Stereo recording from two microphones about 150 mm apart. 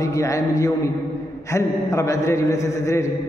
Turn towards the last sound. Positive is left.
turn(degrees=20)  # may be behind; listen again after turning